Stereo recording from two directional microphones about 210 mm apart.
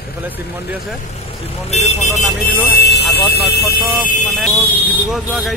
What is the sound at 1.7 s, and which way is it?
Speech, 30° left (ahead or behind).